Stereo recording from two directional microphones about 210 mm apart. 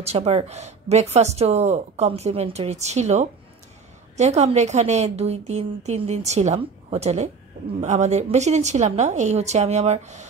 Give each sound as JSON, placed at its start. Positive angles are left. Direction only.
{"t": 0.0, "sound": "speech", "side_deg": -30}